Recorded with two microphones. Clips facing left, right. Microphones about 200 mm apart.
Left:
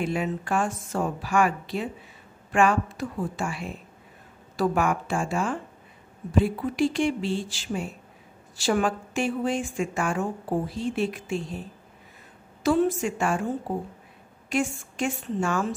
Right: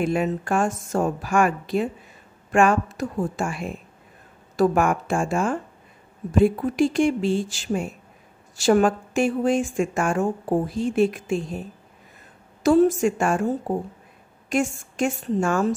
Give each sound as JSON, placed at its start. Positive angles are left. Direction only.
{"t": 0.0, "sound": "a woman's voice", "side_deg": -45}
{"t": 12.6, "sound": "a woman's voice", "side_deg": -45}
{"t": 14.5, "sound": "a woman's voice", "side_deg": -45}